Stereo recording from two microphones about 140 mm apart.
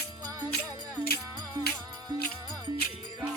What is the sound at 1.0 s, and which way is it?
Music, 10° right (ahead or behind).